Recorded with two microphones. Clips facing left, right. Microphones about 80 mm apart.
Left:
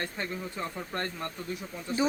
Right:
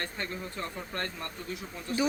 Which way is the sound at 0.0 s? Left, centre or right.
Centre.